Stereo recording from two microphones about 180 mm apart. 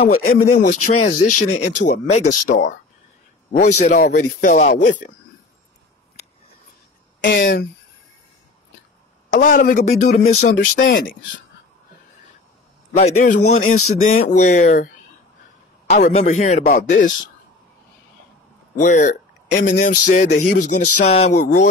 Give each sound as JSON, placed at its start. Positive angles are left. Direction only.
{"t": 0.2, "sound": "speech", "side_deg": 40}
{"t": 3.5, "sound": "speech", "side_deg": 45}
{"t": 4.0, "sound": "speech", "side_deg": 55}
{"t": 7.2, "sound": "speech", "side_deg": 75}
{"t": 9.3, "sound": "speech", "side_deg": 45}
{"t": 12.9, "sound": "speech", "side_deg": 40}
{"t": 15.9, "sound": "speech", "side_deg": 35}
{"t": 18.8, "sound": "speech", "side_deg": 45}